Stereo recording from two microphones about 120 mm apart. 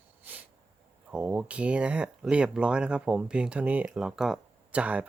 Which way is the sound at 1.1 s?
10° right (ahead or behind).